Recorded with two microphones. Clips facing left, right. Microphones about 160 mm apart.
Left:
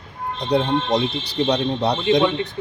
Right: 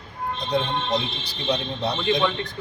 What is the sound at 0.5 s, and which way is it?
Speech, 70° left (ahead or behind).